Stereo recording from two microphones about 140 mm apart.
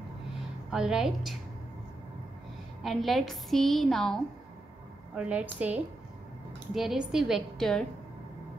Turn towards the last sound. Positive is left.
turn(degrees=5)  # may be behind; listen again after turning